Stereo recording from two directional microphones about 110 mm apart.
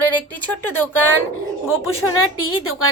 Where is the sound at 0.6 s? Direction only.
20° left (ahead or behind).